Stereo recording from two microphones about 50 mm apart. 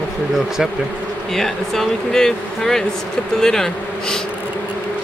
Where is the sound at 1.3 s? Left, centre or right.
Centre.